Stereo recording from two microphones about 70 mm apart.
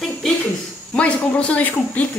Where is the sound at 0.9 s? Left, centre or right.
Centre.